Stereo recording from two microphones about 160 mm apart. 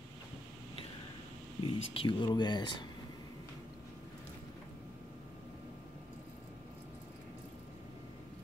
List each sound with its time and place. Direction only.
1.6 s speech: 30° left (ahead or behind)